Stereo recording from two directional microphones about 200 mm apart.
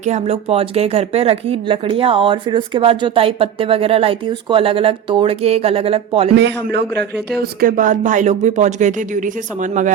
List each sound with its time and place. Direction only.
0.0 s speech: 35° right (ahead or behind)
6.3 s a man's voice: 55° right (ahead or behind); by 9.9 s 40° right (ahead or behind)